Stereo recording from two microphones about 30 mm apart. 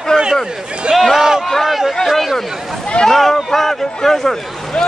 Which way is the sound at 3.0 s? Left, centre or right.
Centre.